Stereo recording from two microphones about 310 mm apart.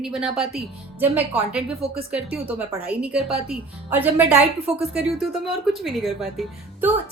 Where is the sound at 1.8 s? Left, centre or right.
Centre.